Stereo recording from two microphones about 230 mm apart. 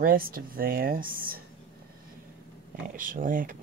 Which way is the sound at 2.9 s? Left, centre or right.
Right.